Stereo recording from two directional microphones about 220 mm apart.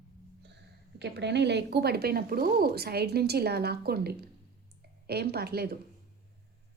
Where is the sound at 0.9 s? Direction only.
50° right (ahead or behind).